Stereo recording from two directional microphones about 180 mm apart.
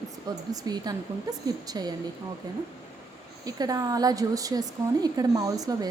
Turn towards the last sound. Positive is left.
turn(degrees=-20)  # may be behind; listen again after turning